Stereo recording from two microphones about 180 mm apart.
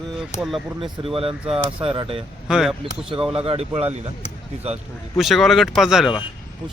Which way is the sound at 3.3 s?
30° right (ahead or behind).